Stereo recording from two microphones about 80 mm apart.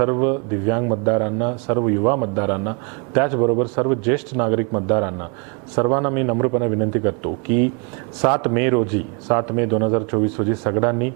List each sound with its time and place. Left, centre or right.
0.0 s speech: right